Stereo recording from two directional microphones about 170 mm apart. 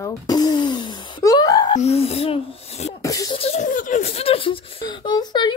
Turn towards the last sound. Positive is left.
turn(degrees=25)  # may be behind; listen again after turning